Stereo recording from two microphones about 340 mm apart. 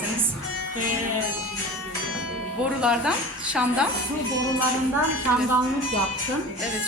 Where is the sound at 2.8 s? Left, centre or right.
Centre.